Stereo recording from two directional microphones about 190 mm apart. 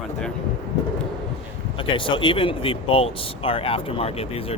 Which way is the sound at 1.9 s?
25° left (ahead or behind).